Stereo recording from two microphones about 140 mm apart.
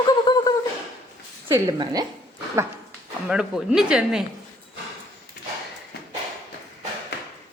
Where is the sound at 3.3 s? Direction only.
5° right (ahead or behind).